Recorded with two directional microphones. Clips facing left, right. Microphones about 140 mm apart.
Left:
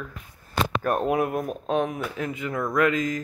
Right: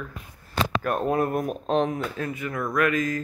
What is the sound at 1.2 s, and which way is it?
Speech, centre (ahead or behind).